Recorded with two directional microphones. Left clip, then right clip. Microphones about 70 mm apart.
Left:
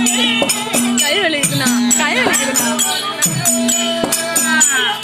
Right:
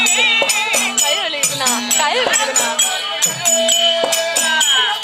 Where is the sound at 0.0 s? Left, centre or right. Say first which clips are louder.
Right 2 dB; centre.